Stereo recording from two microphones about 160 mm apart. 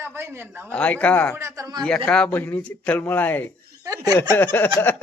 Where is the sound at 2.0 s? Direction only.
5° left (ahead or behind).